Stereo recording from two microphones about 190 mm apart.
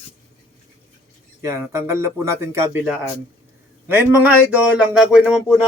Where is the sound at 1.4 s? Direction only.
15° right (ahead or behind).